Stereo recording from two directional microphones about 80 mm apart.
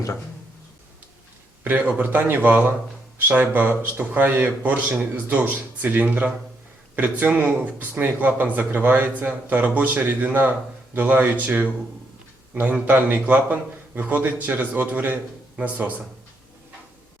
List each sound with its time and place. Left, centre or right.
1.6 s speech: right
12.7 s speech: right